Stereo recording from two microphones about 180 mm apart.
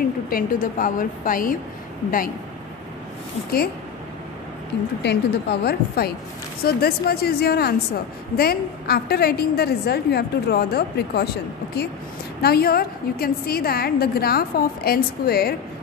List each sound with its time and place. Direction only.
0.3 s a woman's voice: 50° left (ahead or behind)
5.0 s a woman's voice: 65° left (ahead or behind)